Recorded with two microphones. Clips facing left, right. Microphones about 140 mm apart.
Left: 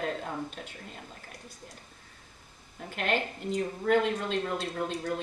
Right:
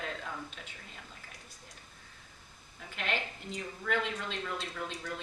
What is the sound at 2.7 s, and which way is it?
A woman's voice, 45° left (ahead or behind).